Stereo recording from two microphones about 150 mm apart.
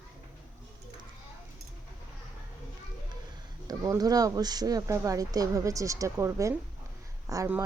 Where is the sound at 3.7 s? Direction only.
25° right (ahead or behind).